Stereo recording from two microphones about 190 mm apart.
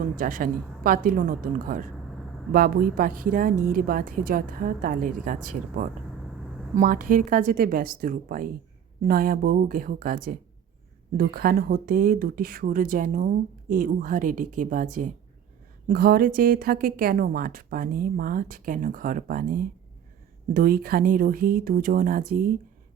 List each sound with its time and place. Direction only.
0.0 s speech: 45° right (ahead or behind)